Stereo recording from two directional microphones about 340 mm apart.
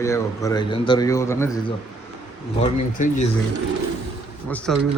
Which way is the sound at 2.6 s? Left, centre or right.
Left.